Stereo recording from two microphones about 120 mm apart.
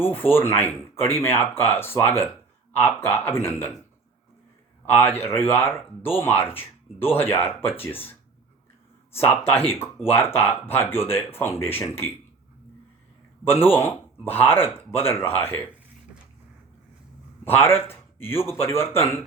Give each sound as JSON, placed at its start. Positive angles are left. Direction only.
{"t": 0.2, "sound": "speech", "side_deg": 20}
{"t": 5.1, "sound": "speech", "side_deg": 20}
{"t": 9.5, "sound": "speech", "side_deg": 20}
{"t": 13.5, "sound": "speech", "side_deg": 20}
{"t": 17.4, "sound": "speech", "side_deg": 20}